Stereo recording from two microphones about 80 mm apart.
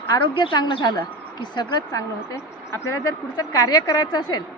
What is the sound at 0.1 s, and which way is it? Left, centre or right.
A woman's voice, left.